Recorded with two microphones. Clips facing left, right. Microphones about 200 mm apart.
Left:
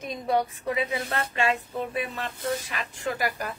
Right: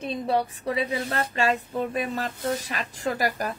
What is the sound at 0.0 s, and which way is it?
A woman's voice, 30° right (ahead or behind).